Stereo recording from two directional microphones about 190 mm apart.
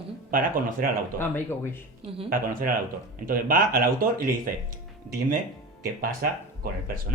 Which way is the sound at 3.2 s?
50° right (ahead or behind).